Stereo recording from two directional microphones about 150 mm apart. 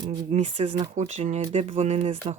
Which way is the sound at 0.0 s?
30° right (ahead or behind).